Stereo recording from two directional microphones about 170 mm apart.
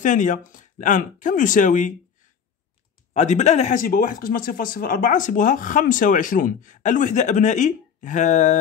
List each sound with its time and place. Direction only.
0.0 s speech: 50° left (ahead or behind)
3.1 s speech: 45° left (ahead or behind)